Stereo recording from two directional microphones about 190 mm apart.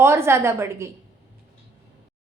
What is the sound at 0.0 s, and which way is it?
Speech, 15° right (ahead or behind).